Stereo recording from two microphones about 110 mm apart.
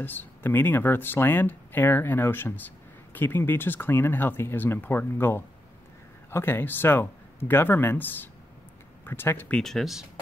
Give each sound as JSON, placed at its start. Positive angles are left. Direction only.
{"t": 0.0, "sound": "speech", "side_deg": 15}
{"t": 9.6, "sound": "speech", "side_deg": 5}